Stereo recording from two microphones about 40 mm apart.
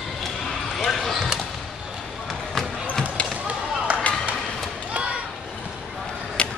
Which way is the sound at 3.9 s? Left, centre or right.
Right.